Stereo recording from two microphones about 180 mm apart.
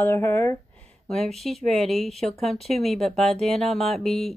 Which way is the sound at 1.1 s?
Centre (ahead or behind).